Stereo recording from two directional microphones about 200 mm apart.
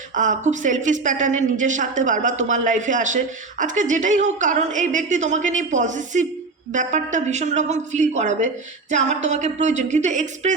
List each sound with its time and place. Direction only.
0.1 s a woman's voice: 40° right (ahead or behind)